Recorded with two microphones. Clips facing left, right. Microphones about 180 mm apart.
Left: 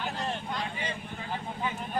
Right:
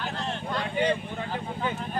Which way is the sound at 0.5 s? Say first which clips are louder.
Right 9 dB; 65° right (ahead or behind).